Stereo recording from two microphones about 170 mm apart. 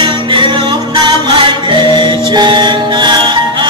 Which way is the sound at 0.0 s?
30° right (ahead or behind).